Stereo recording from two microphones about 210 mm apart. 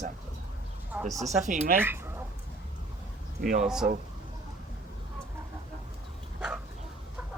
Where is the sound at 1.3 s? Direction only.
35° right (ahead or behind).